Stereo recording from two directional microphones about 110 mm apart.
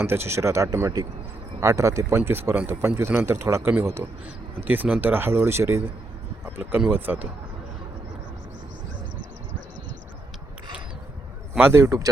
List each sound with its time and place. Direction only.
0.0 s a man's voice: 20° right (ahead or behind)
11.6 s a man's voice: 25° right (ahead or behind)